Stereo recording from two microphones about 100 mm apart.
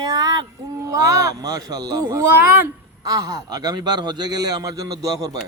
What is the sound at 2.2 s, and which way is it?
Speech, 25° right (ahead or behind).